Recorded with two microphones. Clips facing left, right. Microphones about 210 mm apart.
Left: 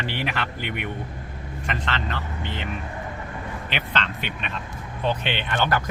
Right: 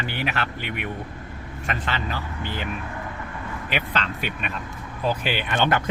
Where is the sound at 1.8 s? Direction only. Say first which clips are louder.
Even; 10° right (ahead or behind).